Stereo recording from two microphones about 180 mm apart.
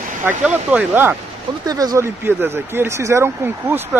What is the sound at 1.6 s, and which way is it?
Speech, 20° right (ahead or behind).